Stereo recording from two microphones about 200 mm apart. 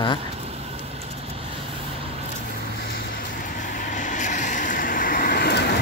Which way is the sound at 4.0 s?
40° left (ahead or behind).